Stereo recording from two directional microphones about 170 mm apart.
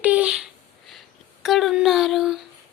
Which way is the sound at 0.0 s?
10° right (ahead or behind).